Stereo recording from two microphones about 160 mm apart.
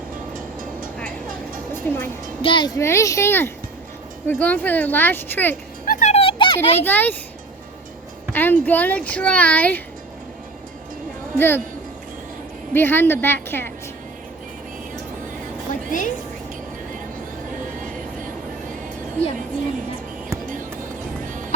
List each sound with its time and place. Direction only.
1.8 s speech: 10° left (ahead or behind)
2.4 s a child's voice: 30° left (ahead or behind)
2.7 s speech: 15° left (ahead or behind)
5.8 s a sound: 55° left (ahead or behind); by 6.7 s 30° left (ahead or behind)
6.7 s speech: 10° left (ahead or behind)
8.3 s speech: 10° left (ahead or behind)
11.3 s speech: 15° left (ahead or behind)
12.7 s speech: 15° left (ahead or behind)
15.7 s music: 55° left (ahead or behind)